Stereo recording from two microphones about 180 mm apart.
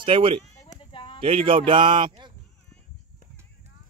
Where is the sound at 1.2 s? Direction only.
30° right (ahead or behind).